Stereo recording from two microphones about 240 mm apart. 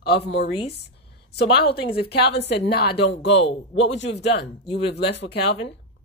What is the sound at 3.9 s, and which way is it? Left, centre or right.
Speech, left.